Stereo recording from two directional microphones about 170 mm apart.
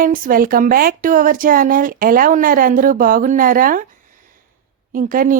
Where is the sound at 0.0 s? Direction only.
55° right (ahead or behind).